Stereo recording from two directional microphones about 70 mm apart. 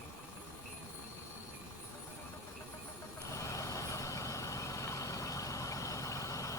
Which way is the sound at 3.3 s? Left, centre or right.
Left.